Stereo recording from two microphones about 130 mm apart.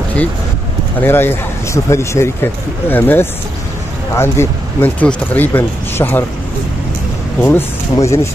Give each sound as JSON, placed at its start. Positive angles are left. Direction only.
{"t": 1.0, "sound": "speech", "side_deg": 15}
{"t": 7.4, "sound": "speech", "side_deg": 20}